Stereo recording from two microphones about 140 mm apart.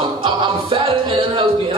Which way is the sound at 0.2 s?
35° right (ahead or behind).